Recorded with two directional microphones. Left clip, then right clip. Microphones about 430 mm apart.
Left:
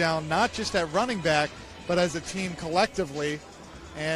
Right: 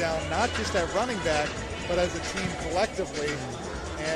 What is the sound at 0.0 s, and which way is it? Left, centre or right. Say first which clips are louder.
Speech: left 2 dB; left.